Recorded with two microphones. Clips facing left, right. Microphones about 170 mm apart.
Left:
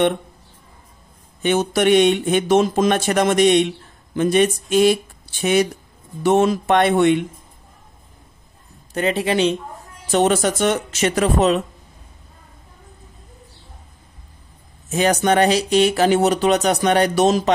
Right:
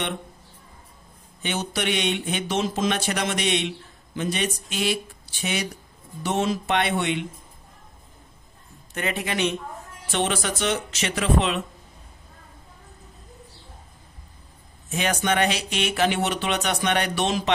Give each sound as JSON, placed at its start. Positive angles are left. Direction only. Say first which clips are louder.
{"t": 1.4, "sound": "speech", "louder": "left 10 dB", "side_deg": 50}
{"t": 8.9, "sound": "speech", "louder": "left 8 dB", "side_deg": 30}
{"t": 10.0, "sound": "speech", "louder": "left 9 dB", "side_deg": 45}
{"t": 14.9, "sound": "speech", "louder": "left 7 dB", "side_deg": 40}